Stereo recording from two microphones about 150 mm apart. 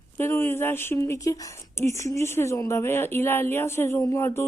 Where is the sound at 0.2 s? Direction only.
15° left (ahead or behind).